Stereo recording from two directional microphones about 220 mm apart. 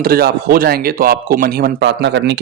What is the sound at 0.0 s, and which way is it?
Speech, 45° right (ahead or behind).